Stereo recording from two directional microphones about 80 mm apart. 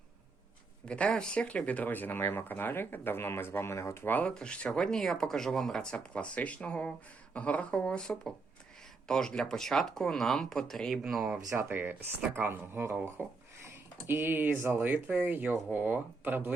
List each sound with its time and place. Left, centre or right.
0.9 s speech: centre; by 4.2 s left
4.2 s speech: centre
11.0 s speech: centre
11.5 s speech: right